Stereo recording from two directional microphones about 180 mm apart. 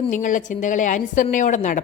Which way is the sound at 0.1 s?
45° left (ahead or behind).